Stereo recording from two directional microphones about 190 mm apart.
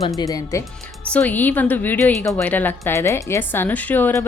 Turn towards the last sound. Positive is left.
turn(degrees=10)  # may be behind; listen again after turning